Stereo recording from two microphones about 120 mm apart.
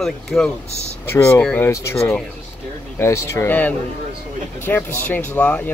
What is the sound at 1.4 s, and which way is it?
Speech, 10° left (ahead or behind).